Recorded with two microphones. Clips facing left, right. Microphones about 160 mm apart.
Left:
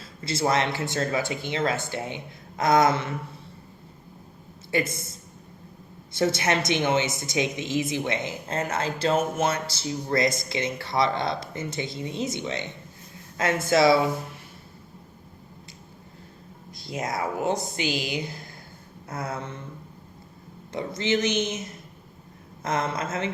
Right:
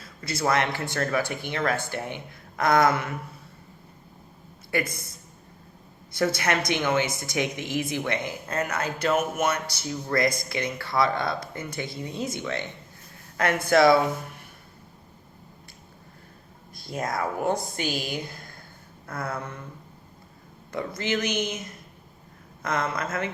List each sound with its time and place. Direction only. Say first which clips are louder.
0.0 s speech: left 1 dB; 25° left (ahead or behind)
4.7 s speech: left 2 dB; 25° left (ahead or behind)
6.1 s speech: left 1 dB; 25° left (ahead or behind)
13.7 s a woman's voice: right 1 dB; 50° right (ahead or behind)
17.7 s a woman's voice: left 2 dB; 50° right (ahead or behind)
19.0 s speech: even; 25° left (ahead or behind)
20.7 s speech: left 2 dB; 25° left (ahead or behind)